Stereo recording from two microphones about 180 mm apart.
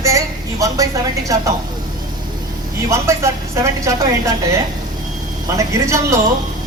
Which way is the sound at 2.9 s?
15° right (ahead or behind).